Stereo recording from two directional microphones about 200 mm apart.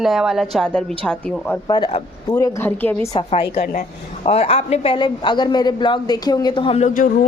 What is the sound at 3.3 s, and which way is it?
A woman's voice, 30° left (ahead or behind).